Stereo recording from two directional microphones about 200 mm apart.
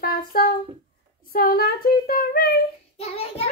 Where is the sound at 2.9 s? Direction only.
30° left (ahead or behind).